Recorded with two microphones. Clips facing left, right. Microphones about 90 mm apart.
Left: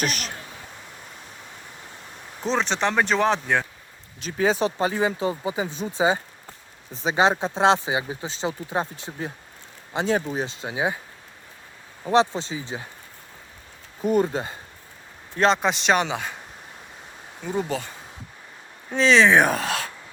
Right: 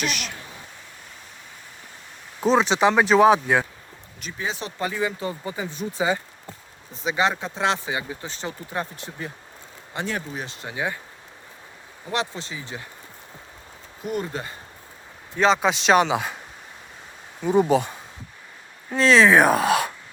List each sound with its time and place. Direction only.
0.0 s speech: 40° left (ahead or behind)
2.4 s speech: 5° right (ahead or behind)
4.8 s speech: 25° left (ahead or behind)
5.3 s speech: 15° left (ahead or behind)
12.0 s speech: 30° left (ahead or behind)
14.0 s speech: 40° left (ahead or behind)
15.4 s speech: centre (ahead or behind)
17.4 s speech: 15° right (ahead or behind)
18.9 s speech: centre (ahead or behind)